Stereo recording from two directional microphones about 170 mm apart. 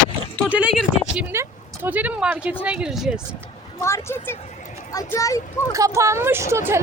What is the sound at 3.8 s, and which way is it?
A woman's voice, 15° left (ahead or behind).